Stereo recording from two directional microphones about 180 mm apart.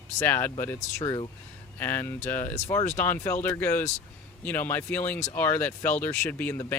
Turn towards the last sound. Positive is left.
turn(degrees=10)  # may be behind; listen again after turning